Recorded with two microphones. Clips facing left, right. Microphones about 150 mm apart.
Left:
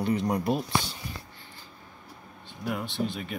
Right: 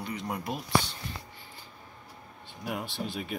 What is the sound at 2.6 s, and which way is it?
Speech, 5° right (ahead or behind).